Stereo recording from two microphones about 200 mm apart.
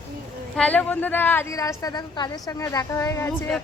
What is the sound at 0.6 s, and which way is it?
A woman's voice, 5° left (ahead or behind).